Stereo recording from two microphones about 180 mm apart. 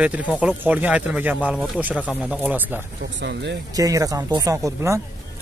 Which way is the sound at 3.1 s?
70° right (ahead or behind).